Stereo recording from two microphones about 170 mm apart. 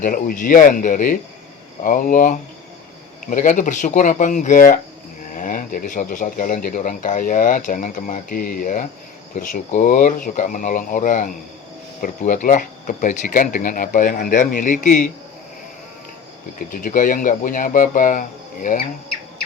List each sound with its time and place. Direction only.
0.0 s speech: 55° left (ahead or behind)
16.8 s speech: 55° left (ahead or behind)